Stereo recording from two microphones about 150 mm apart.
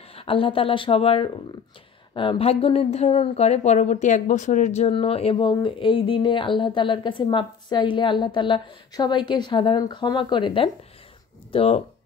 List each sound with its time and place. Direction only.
0.1 s speech: 40° left (ahead or behind)